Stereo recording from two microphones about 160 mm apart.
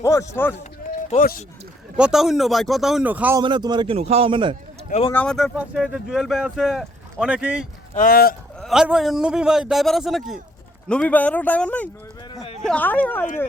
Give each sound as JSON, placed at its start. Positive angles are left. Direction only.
{"t": 0.0, "sound": "speech", "side_deg": 20}
{"t": 2.0, "sound": "speech", "side_deg": -5}
{"t": 3.4, "sound": "speech", "side_deg": -25}
{"t": 5.1, "sound": "speech", "side_deg": 5}
{"t": 7.9, "sound": "speech", "side_deg": 65}
{"t": 8.6, "sound": "speech", "side_deg": -5}